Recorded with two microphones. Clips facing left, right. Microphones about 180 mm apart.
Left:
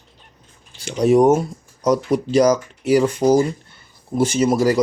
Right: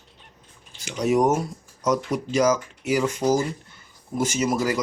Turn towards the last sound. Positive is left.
turn(degrees=30)  # may be behind; listen again after turning